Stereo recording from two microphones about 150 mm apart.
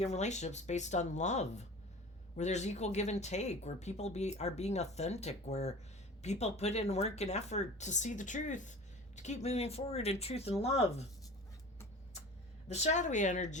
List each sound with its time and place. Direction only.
0.0 s speech: 50° left (ahead or behind)
12.6 s speech: 50° left (ahead or behind)